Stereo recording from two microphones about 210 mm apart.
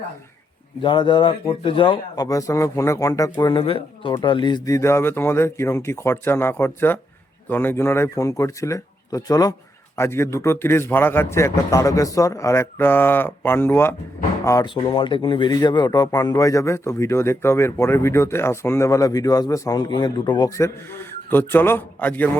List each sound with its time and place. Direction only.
0.8 s speech: 25° left (ahead or behind)